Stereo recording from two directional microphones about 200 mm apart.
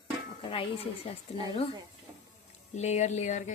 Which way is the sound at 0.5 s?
30° left (ahead or behind).